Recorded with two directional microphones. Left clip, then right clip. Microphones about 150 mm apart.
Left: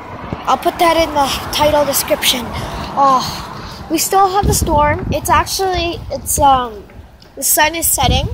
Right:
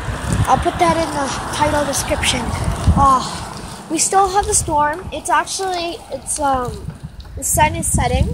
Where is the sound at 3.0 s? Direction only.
65° left (ahead or behind).